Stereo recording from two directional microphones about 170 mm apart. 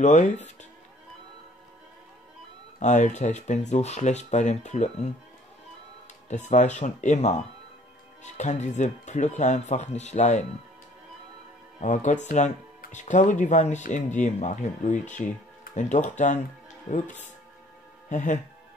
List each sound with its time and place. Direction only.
0.0 s speech: 45° left (ahead or behind)
2.8 s speech: 45° left (ahead or behind)
6.2 s speech: 45° left (ahead or behind)
11.8 s speech: 45° left (ahead or behind)